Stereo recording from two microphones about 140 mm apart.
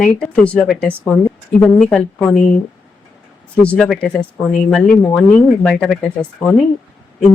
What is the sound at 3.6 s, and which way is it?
Speech, 5° left (ahead or behind).